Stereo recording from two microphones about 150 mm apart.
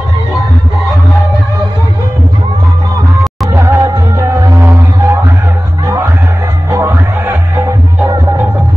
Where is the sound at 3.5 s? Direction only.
20° right (ahead or behind).